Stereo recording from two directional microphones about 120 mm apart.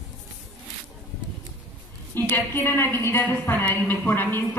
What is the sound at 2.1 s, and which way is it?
A woman's voice, 15° left (ahead or behind).